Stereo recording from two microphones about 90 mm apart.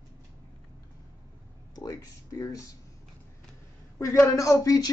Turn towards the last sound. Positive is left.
turn(degrees=40)  # may be behind; listen again after turning